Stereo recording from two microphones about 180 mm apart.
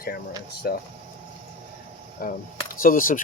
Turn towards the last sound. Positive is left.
turn(degrees=50)  # may be behind; listen again after turning